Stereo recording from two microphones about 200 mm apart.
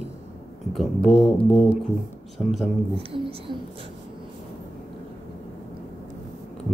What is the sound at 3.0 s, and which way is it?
Speech, 30° right (ahead or behind).